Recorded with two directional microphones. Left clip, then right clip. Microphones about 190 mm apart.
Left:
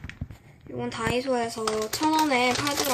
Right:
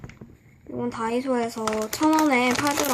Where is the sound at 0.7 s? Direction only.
15° right (ahead or behind).